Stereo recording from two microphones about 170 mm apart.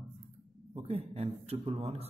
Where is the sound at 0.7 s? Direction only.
35° right (ahead or behind).